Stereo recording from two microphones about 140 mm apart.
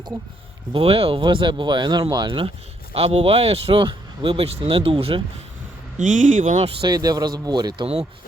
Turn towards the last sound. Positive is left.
turn(degrees=-30)  # may be behind; listen again after turning